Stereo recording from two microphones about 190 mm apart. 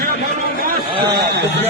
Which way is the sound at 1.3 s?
60° right (ahead or behind).